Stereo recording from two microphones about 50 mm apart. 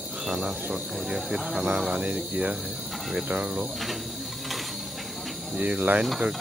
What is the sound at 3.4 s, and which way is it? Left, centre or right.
Speech, centre.